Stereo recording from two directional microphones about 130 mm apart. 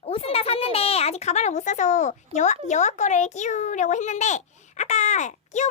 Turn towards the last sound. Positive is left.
turn(degrees=65)  # may be behind; listen again after turning